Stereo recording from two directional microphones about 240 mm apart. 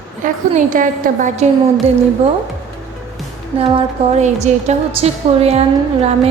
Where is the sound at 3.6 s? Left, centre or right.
Right.